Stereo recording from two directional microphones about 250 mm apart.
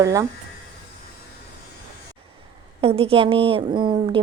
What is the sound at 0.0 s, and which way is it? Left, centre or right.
Speech, centre.